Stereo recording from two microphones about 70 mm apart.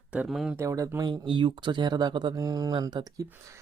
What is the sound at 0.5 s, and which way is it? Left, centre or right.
Speech, right.